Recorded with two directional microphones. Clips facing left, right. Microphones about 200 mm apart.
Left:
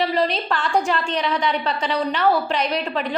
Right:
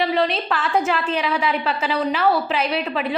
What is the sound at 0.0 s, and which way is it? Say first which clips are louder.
A woman's voice: right 1 dB; centre (ahead or behind).